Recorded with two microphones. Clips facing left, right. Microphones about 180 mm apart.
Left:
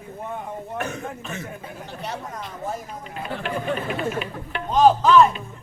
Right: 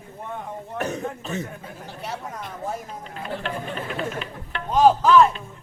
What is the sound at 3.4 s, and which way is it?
Speech, 10° left (ahead or behind).